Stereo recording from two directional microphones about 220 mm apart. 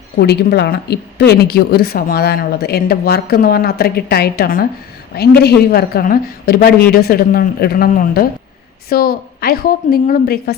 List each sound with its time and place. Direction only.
0.2 s a woman's voice: 50° left (ahead or behind)